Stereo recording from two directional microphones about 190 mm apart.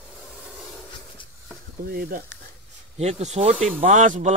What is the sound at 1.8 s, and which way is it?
Speech, 50° right (ahead or behind).